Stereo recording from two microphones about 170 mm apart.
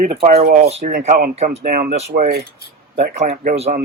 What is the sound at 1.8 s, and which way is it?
Speech, 40° right (ahead or behind).